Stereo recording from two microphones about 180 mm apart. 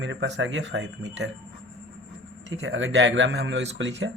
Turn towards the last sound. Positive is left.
turn(degrees=-85)